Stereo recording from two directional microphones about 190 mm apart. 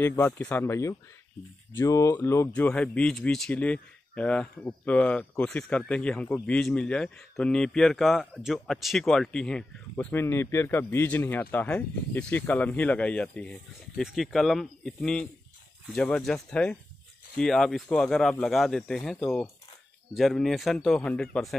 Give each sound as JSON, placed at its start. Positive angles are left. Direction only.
{"t": 0.0, "sound": "speech", "side_deg": 10}